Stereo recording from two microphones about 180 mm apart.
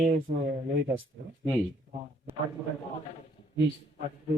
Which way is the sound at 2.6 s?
5° right (ahead or behind).